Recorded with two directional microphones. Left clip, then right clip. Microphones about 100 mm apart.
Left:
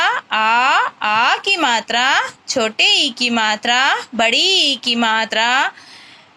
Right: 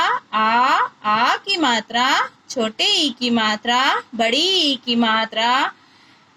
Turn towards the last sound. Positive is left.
turn(degrees=35)  # may be behind; listen again after turning